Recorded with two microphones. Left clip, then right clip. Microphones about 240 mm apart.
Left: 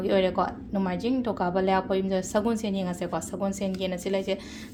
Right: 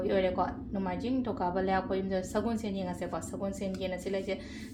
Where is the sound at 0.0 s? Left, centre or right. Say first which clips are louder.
Left 5 dB; left.